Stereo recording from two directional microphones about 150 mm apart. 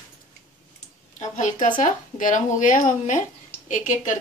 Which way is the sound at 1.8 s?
60° left (ahead or behind).